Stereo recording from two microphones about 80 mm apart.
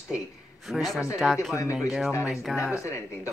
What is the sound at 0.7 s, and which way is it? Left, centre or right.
Speech, centre.